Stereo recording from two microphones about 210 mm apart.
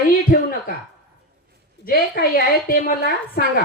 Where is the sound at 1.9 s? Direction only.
45° left (ahead or behind).